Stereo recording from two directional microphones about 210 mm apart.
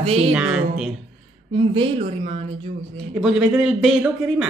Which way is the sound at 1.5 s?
25° right (ahead or behind).